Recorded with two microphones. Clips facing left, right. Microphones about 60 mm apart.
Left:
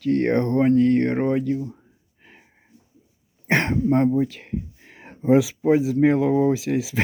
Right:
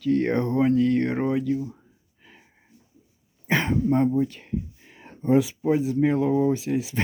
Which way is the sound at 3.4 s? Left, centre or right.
Left.